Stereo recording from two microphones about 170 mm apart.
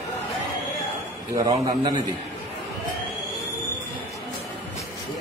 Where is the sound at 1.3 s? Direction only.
20° right (ahead or behind).